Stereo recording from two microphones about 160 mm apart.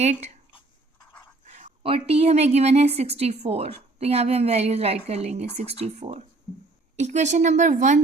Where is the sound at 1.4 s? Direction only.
45° right (ahead or behind).